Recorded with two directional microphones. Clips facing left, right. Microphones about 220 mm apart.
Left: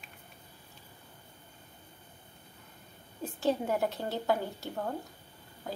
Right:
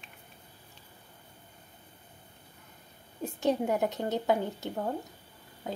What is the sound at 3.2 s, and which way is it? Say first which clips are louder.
A woman's voice: right 2 dB; 15° right (ahead or behind).